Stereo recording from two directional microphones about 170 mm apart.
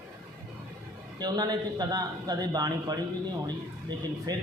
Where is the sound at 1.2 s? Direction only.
25° right (ahead or behind).